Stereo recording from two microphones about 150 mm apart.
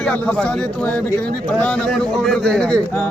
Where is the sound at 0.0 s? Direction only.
5° left (ahead or behind).